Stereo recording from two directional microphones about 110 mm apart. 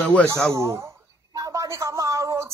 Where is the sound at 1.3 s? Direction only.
30° right (ahead or behind).